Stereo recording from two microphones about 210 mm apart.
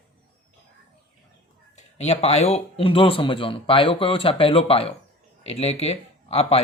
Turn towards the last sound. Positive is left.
turn(degrees=30)  # may be behind; listen again after turning